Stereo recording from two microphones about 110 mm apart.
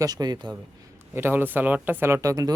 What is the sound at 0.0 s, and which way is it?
Speech, 35° right (ahead or behind).